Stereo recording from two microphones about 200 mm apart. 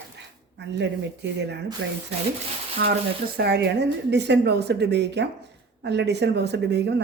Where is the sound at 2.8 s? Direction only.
55° right (ahead or behind).